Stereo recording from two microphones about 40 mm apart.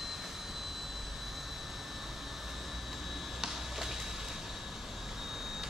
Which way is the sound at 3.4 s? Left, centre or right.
Centre.